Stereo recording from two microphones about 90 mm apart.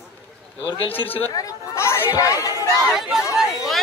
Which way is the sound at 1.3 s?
35° left (ahead or behind).